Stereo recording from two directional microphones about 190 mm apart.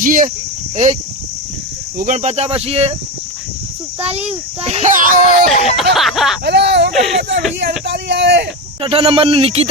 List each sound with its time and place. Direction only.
0.0 s speech: 45° right (ahead or behind)
2.0 s a child's voice: 40° right (ahead or behind)
4.0 s a child's voice: 35° right (ahead or behind)
5.5 s a sound: 35° left (ahead or behind)
5.8 s a sound: centre (ahead or behind)
6.4 s a sound: 65° right (ahead or behind)
6.9 s speech: centre (ahead or behind)
7.2 s speech: 65° right (ahead or behind)
8.8 s speech: 30° right (ahead or behind)